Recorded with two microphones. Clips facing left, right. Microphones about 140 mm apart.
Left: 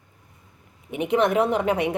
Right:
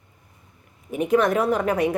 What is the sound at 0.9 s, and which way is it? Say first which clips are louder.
A woman's voice: right 1 dB; 20° left (ahead or behind).